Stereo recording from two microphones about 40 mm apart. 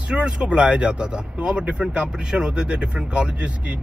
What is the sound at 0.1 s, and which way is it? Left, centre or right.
Speech, right.